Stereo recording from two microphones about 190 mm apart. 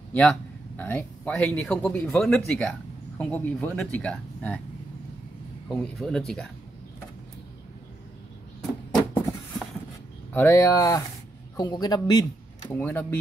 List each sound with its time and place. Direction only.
0.1 s speech: 5° left (ahead or behind)
5.7 s a man's voice: 5° left (ahead or behind)
10.3 s a man's voice: 10° left (ahead or behind)
12.6 s speech: 10° left (ahead or behind)